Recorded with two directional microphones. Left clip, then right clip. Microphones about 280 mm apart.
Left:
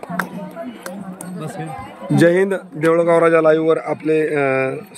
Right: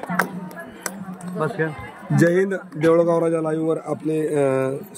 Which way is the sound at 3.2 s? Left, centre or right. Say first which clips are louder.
Left 9 dB; centre.